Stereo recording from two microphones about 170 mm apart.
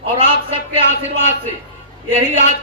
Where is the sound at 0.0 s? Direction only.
35° right (ahead or behind).